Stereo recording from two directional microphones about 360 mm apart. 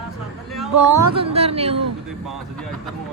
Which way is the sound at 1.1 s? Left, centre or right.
Centre.